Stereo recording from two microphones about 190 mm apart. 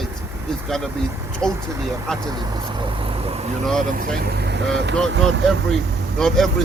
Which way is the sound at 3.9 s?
60° right (ahead or behind).